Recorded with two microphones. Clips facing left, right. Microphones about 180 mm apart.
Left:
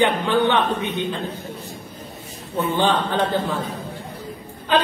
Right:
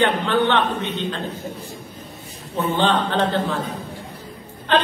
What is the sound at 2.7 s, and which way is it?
Speech, 10° left (ahead or behind).